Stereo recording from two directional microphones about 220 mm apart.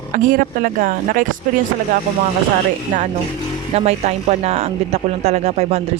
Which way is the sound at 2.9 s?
35° right (ahead or behind).